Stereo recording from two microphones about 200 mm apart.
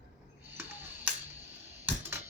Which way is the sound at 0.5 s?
10° right (ahead or behind).